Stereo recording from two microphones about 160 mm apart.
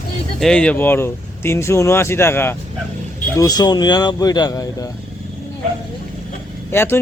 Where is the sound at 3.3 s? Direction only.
25° left (ahead or behind).